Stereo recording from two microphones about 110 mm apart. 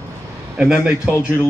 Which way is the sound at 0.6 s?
5° right (ahead or behind).